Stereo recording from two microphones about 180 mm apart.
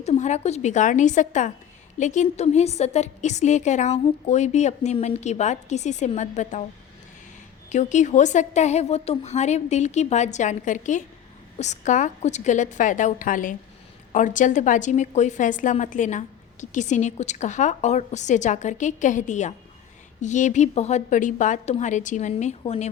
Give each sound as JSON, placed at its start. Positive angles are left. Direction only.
{"t": 0.0, "sound": "a woman's voice", "side_deg": 40}
{"t": 7.7, "sound": "a woman's voice", "side_deg": 40}